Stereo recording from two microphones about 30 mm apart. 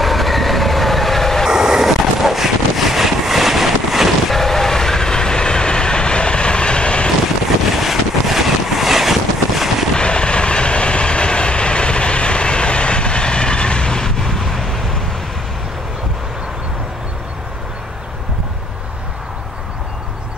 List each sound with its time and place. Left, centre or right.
0.0 s train: centre
1.5 s vehicle: centre
4.3 s train: centre; by 7.1 s left
7.7 s boat: centre
9.9 s train: left; by 15.0 s centre